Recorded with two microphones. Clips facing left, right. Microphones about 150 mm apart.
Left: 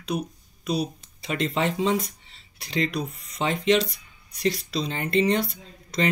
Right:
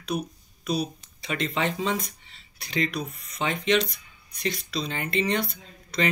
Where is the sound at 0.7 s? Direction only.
25° left (ahead or behind).